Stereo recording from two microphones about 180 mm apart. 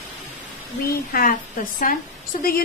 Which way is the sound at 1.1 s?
50° left (ahead or behind).